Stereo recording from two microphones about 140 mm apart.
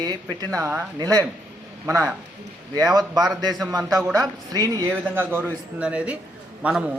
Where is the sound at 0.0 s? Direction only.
30° right (ahead or behind).